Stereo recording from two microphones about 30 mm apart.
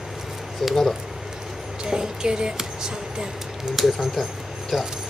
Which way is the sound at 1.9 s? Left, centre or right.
Right.